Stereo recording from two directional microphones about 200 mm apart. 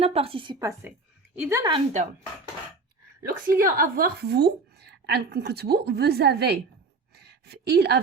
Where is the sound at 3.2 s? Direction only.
45° right (ahead or behind).